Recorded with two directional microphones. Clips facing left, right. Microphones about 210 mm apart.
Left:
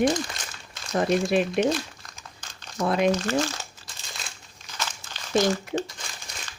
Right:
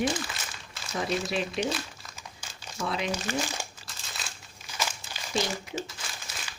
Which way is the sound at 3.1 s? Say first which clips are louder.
Left 6 dB; 15° right (ahead or behind).